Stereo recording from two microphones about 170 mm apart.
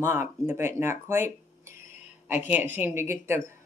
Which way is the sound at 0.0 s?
15° right (ahead or behind).